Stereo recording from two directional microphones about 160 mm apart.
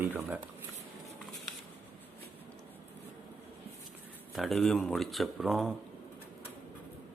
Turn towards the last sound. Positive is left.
turn(degrees=0)  # may be behind; listen again after turning